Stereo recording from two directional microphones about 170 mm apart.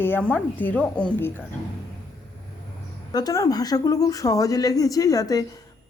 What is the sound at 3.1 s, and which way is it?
Speech, 20° left (ahead or behind).